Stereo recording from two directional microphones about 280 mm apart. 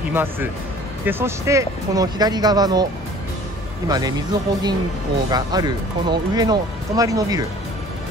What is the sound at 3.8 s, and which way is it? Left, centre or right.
Speech, centre.